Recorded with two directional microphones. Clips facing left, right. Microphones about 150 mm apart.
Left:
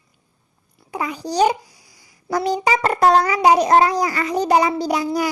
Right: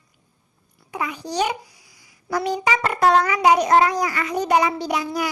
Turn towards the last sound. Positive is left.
turn(degrees=35)  # may be behind; listen again after turning